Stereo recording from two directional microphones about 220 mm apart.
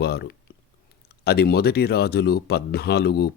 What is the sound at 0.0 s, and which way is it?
Speech, 45° left (ahead or behind).